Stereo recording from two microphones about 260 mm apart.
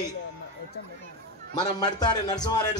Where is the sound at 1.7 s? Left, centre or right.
Centre.